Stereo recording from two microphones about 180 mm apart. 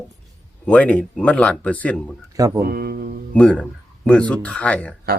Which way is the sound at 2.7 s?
55° right (ahead or behind).